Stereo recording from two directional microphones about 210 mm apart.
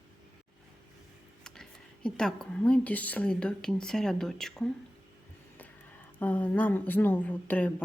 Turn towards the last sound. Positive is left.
turn(degrees=10)  # may be behind; listen again after turning